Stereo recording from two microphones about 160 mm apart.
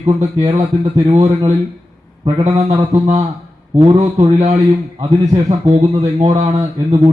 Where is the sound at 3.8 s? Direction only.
40° right (ahead or behind).